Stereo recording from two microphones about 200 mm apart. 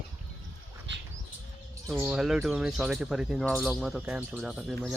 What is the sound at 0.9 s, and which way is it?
Bird flight, 60° right (ahead or behind).